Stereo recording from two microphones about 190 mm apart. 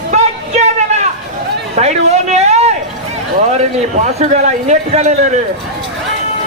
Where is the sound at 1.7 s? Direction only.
35° right (ahead or behind).